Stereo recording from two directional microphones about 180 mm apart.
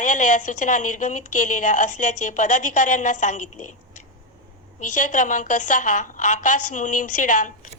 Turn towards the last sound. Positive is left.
turn(degrees=45)  # may be behind; listen again after turning